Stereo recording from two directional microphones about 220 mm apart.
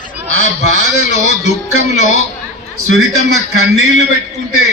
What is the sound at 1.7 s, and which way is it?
Speech, 65° right (ahead or behind).